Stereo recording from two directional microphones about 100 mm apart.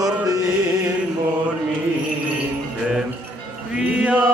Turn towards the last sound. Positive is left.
turn(degrees=-15)  # may be behind; listen again after turning